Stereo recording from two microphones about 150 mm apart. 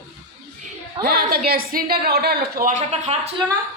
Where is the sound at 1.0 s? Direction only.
90° right.